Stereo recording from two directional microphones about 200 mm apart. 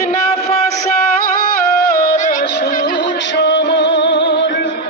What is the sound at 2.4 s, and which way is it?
Music, 55° left (ahead or behind).